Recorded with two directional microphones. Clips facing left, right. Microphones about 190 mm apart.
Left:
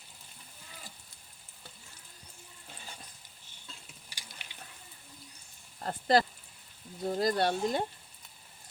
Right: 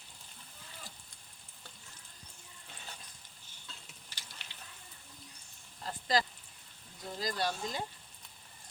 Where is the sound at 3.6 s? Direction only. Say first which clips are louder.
Left 2 dB; 10° left (ahead or behind).